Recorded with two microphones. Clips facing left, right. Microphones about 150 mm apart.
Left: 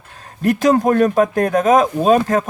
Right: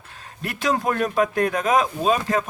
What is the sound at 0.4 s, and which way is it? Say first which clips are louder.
Speech: left 9 dB; 45° left (ahead or behind).